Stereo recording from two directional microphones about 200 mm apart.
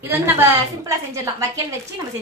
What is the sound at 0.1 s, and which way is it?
A woman's voice, 15° right (ahead or behind).